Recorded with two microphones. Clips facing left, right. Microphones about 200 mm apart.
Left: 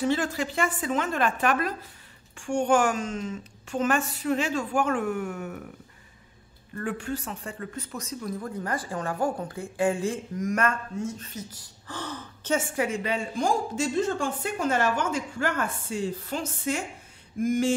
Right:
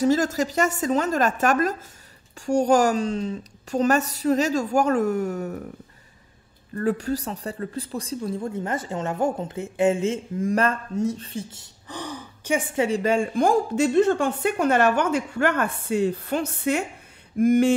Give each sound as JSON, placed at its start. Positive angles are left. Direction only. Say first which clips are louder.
{"t": 0.0, "sound": "a woman's voice", "louder": "right 5 dB", "side_deg": -40}
{"t": 6.7, "sound": "speech", "louder": "right 7 dB", "side_deg": -40}
{"t": 13.0, "sound": "a woman's voice", "louder": "right 7 dB", "side_deg": -50}